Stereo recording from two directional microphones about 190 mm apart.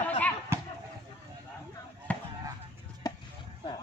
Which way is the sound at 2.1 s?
10° left (ahead or behind).